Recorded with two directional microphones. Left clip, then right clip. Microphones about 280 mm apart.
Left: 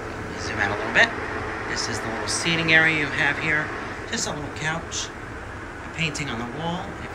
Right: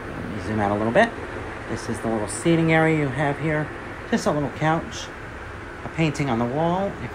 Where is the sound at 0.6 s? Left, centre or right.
Right.